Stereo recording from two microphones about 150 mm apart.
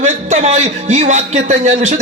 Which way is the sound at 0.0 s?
50° right (ahead or behind).